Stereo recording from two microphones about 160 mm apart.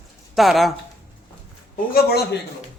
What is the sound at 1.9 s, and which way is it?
Speech, 85° left.